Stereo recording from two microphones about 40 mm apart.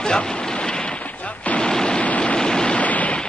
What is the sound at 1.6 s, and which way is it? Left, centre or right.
Machine gun, centre.